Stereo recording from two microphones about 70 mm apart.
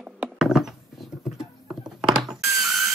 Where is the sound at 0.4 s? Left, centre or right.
Centre.